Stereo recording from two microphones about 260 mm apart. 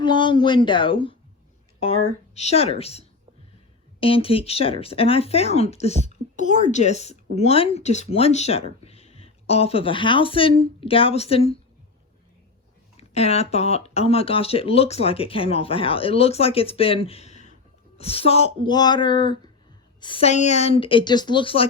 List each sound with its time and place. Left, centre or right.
0.0 s speech: centre
2.3 s speech: left
4.0 s speech: left
13.0 s speech: left